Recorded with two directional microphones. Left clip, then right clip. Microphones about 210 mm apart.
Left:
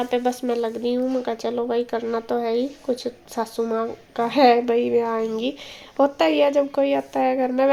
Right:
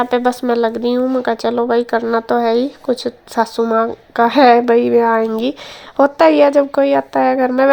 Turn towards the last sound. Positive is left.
turn(degrees=-20)  # may be behind; listen again after turning